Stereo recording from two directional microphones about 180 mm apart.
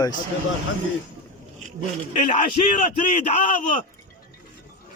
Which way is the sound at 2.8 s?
45° left (ahead or behind).